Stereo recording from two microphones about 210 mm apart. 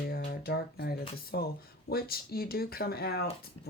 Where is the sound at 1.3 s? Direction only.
50° left (ahead or behind).